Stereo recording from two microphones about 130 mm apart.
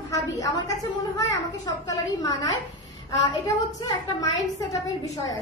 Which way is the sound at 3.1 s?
30° left (ahead or behind).